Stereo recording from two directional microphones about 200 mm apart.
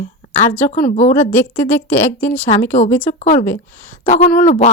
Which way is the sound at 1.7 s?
10° left (ahead or behind).